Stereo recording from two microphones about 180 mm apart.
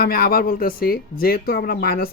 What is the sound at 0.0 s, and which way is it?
Speech, 55° left (ahead or behind).